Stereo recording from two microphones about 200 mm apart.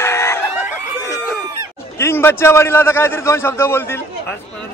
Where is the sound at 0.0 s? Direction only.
15° left (ahead or behind).